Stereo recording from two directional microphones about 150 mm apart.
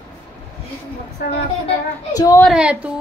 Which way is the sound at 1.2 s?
90° left.